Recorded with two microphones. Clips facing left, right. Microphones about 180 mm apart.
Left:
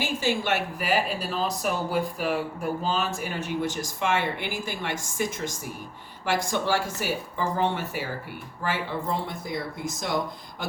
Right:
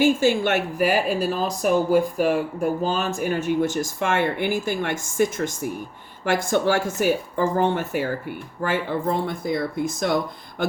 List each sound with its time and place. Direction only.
0.0 s speech: 50° right (ahead or behind)